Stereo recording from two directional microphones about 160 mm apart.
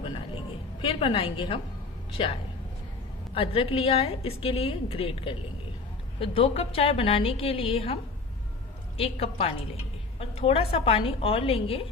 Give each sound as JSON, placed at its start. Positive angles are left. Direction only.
{"t": 0.0, "sound": "a sound", "side_deg": 30}
{"t": 3.3, "sound": "a woman's voice", "side_deg": 35}
{"t": 9.0, "sound": "a woman's voice", "side_deg": 40}